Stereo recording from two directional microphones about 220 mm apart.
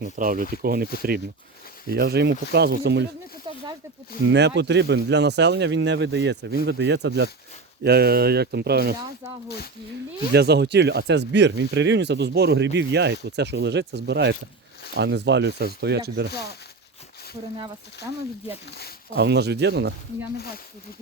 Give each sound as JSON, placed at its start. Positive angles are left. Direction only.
{"t": 0.0, "sound": "speech", "side_deg": -40}
{"t": 1.9, "sound": "speech", "side_deg": -45}
{"t": 3.5, "sound": "snake", "side_deg": -20}
{"t": 4.3, "sound": "speech", "side_deg": -50}
{"t": 10.3, "sound": "speech", "side_deg": -50}
{"t": 16.3, "sound": "speech", "side_deg": 45}
{"t": 17.6, "sound": "speech", "side_deg": -15}
{"t": 19.1, "sound": "speech", "side_deg": -50}